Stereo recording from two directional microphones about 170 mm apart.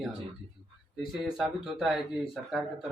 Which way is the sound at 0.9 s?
Centre (ahead or behind).